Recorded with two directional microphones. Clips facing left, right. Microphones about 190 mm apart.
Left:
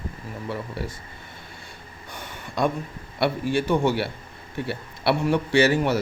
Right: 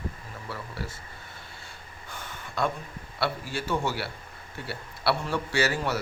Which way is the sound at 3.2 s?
20° left (ahead or behind).